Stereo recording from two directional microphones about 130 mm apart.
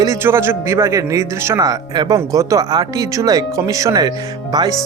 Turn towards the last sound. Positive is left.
turn(degrees=-30)  # may be behind; listen again after turning